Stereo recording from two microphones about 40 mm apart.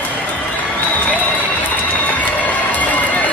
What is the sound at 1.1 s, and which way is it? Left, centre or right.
Crowd, left.